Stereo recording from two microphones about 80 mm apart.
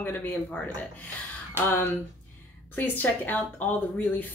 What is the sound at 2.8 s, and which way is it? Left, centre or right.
Speech, left.